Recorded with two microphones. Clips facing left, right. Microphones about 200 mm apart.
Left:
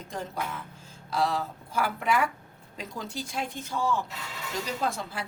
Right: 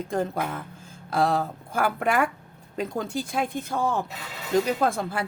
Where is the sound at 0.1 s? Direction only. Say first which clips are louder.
Right 6 dB; 55° right (ahead or behind).